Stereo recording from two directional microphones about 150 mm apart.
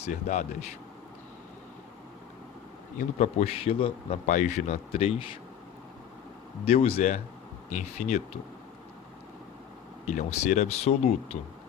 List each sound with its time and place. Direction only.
0.0 s speech: 50° left (ahead or behind)
3.2 s a man's voice: 45° left (ahead or behind)
4.3 s speech: 55° left (ahead or behind)
6.7 s speech: 45° left (ahead or behind)
10.1 s speech: 50° left (ahead or behind)